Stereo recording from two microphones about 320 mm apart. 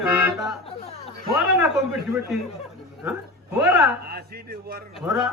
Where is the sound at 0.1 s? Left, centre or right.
Centre.